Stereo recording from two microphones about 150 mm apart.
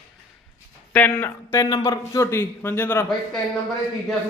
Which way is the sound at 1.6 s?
25° left (ahead or behind).